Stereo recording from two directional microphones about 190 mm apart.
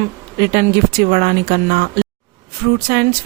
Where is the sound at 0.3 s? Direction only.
55° right (ahead or behind).